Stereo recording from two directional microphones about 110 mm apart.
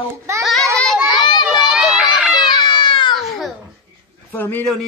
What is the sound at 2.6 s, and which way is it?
Cat, 45° left (ahead or behind).